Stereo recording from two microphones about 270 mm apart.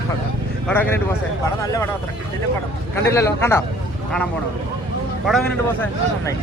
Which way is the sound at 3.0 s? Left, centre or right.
Centre.